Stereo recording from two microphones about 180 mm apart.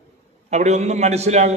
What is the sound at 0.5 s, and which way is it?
A man's voice, 40° right (ahead or behind).